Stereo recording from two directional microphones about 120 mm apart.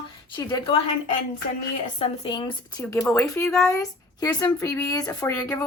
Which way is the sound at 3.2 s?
20° left (ahead or behind).